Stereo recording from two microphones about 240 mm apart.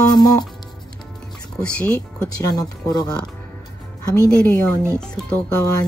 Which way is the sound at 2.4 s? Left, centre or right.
Centre.